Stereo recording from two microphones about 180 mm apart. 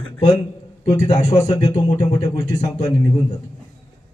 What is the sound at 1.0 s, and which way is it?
Speech, 40° left (ahead or behind).